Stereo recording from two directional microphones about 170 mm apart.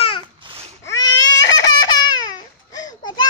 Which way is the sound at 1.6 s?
25° left (ahead or behind).